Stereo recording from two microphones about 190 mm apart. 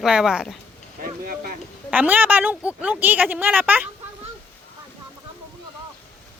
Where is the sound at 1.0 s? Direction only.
50° right (ahead or behind).